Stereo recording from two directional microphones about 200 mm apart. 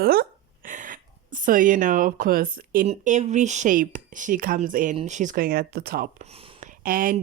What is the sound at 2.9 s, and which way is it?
A woman's voice, 35° right (ahead or behind).